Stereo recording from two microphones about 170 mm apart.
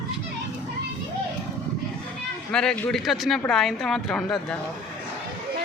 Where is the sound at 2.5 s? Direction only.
5° left (ahead or behind).